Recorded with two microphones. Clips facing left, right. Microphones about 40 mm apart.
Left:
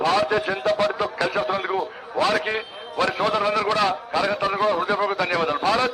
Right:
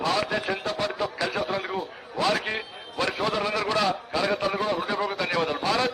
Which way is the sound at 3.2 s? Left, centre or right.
Centre.